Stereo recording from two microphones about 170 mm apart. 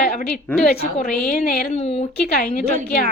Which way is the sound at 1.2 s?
55° left (ahead or behind).